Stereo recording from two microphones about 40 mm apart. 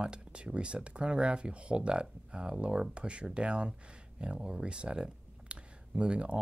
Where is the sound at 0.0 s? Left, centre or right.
Right.